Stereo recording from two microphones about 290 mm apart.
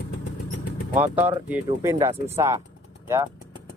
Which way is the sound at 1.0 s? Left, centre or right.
Centre.